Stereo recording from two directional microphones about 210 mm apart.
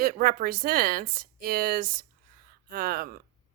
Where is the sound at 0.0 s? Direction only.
45° right (ahead or behind).